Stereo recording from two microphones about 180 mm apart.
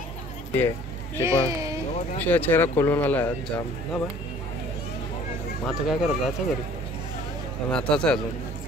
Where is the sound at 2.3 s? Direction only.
10° left (ahead or behind).